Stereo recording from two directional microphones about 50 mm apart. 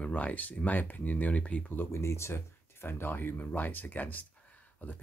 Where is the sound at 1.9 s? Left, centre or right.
Left.